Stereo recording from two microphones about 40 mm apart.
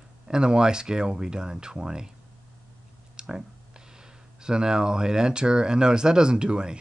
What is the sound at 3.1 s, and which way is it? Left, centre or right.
Clicking, centre.